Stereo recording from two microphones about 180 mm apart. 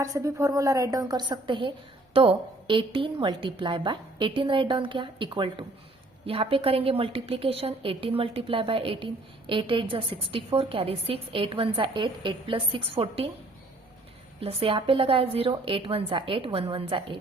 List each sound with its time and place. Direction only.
0.0 s a woman's voice: 20° right (ahead or behind)
14.4 s a woman's voice: 30° right (ahead or behind)